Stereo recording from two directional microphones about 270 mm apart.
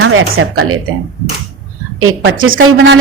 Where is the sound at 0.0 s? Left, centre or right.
Right.